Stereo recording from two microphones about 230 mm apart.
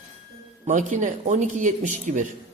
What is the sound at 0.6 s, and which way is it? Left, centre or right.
A man's voice, right.